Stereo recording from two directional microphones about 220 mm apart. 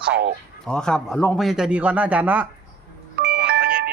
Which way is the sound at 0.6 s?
5° left (ahead or behind).